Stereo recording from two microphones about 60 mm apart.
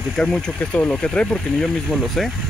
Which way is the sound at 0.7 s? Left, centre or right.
Left.